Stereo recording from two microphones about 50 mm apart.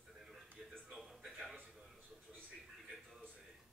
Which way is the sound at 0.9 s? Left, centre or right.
Centre.